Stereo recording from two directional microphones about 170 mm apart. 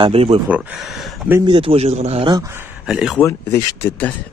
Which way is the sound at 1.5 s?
30° right (ahead or behind).